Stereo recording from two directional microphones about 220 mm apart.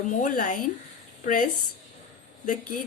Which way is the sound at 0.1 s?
35° left (ahead or behind).